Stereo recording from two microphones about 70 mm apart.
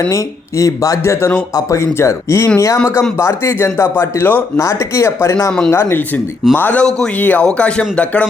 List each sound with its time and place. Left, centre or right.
0.1 s speech: left
4.5 s speech: left
6.5 s speech: left